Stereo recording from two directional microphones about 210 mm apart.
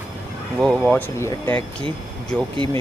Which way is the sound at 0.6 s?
5° left (ahead or behind).